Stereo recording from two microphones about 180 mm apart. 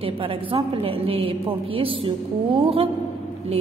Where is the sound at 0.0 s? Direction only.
30° right (ahead or behind).